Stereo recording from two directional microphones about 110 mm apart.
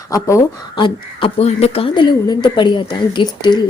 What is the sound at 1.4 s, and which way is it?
Speech, 70° left (ahead or behind).